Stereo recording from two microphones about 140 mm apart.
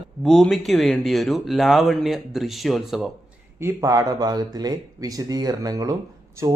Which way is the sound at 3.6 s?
20° right (ahead or behind).